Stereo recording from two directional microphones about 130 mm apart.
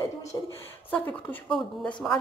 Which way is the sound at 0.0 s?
25° left (ahead or behind).